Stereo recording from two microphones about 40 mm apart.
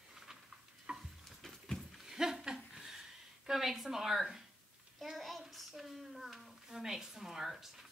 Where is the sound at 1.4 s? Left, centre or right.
Centre.